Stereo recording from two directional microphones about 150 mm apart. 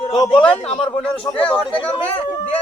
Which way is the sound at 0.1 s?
30° left (ahead or behind).